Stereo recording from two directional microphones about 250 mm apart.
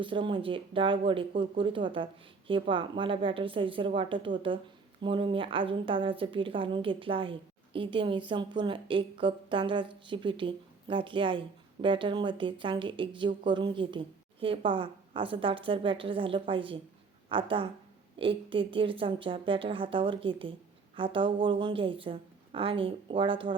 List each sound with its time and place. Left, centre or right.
0.0 s a woman's voice: centre